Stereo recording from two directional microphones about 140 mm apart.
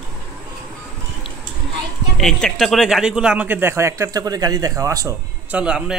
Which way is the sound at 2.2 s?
5° left (ahead or behind).